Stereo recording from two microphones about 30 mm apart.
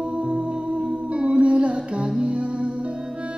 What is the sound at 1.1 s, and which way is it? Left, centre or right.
Music, right.